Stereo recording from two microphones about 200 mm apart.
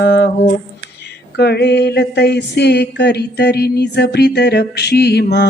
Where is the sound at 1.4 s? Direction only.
55° left (ahead or behind).